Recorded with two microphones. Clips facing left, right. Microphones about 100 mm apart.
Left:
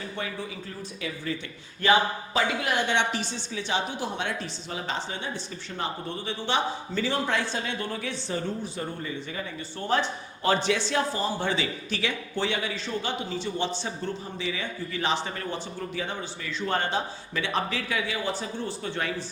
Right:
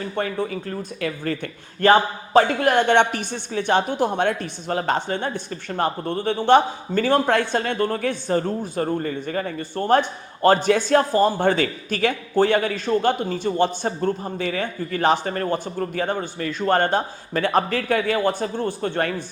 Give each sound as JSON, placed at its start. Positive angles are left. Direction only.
{"t": 0.0, "sound": "speech", "side_deg": -50}